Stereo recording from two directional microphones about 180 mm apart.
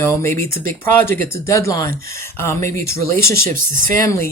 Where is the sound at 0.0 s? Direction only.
15° left (ahead or behind).